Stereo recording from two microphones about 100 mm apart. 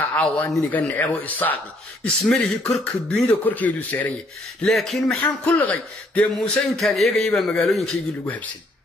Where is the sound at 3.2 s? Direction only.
15° left (ahead or behind).